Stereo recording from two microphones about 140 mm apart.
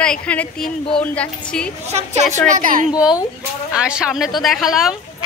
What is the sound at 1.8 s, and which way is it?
Speech, 50° right (ahead or behind).